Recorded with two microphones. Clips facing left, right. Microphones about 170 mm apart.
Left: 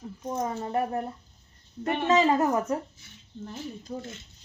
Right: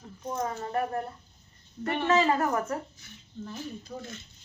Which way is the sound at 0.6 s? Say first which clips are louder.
Left 2 dB; 20° left (ahead or behind).